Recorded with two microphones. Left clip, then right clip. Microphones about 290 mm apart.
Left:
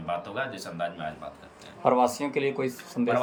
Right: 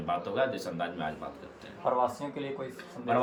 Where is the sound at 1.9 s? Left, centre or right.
Left.